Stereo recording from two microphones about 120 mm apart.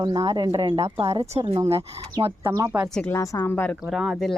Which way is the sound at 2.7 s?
25° right (ahead or behind).